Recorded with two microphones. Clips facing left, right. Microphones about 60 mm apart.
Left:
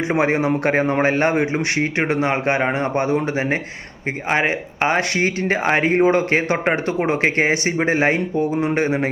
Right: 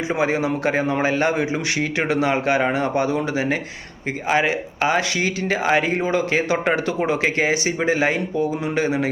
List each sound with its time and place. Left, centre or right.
0.1 s speech: left